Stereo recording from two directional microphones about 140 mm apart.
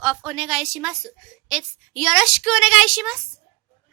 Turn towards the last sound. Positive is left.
turn(degrees=0)  # may be behind; listen again after turning